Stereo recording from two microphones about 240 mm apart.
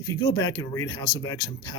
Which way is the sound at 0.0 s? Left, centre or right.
Centre.